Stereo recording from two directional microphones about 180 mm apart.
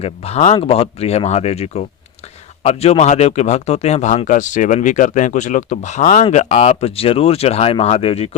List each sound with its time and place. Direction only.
0.0 s speech: 35° left (ahead or behind)